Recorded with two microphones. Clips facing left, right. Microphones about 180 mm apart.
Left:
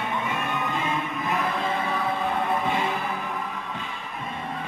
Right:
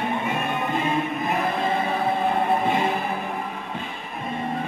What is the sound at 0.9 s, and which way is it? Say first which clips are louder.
Music: right 3 dB; 35° right (ahead or behind).